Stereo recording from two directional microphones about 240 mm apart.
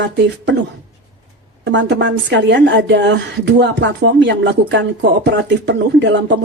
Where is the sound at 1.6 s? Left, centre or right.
Right.